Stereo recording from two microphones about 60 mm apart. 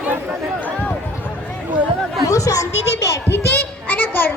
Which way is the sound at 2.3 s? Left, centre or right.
Left.